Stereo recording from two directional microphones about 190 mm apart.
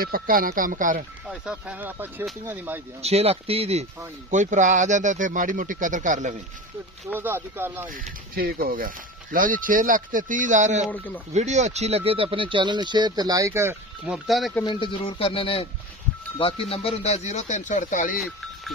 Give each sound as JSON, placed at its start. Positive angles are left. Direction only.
{"t": 0.0, "sound": "speech", "side_deg": -50}
{"t": 1.3, "sound": "speech", "side_deg": -5}
{"t": 3.0, "sound": "speech", "side_deg": -35}
{"t": 7.1, "sound": "speech", "side_deg": -10}
{"t": 7.9, "sound": "speech", "side_deg": -50}
{"t": 14.6, "sound": "speech", "side_deg": 25}
{"t": 18.1, "sound": "speech", "side_deg": 0}